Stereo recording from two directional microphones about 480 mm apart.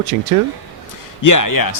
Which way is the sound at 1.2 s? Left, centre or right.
Left.